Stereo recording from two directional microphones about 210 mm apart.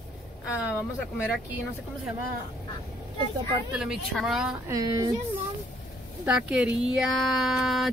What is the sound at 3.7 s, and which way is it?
Speech, 5° right (ahead or behind).